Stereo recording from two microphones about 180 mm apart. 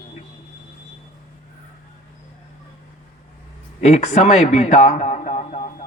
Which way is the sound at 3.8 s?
40° left (ahead or behind).